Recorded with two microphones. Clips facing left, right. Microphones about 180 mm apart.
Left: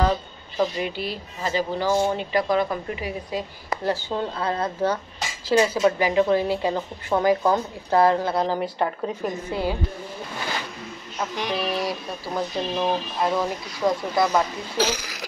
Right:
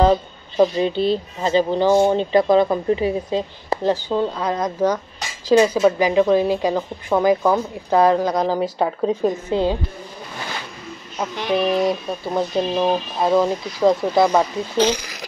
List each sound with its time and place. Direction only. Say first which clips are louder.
0.6 s a woman's voice: right 8 dB; 30° right (ahead or behind)
11.5 s speech: right 10 dB; 20° right (ahead or behind)
14.8 s speech: right 6 dB; 5° left (ahead or behind)